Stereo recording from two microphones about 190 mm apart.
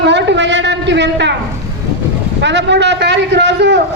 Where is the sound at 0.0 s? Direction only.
65° right (ahead or behind).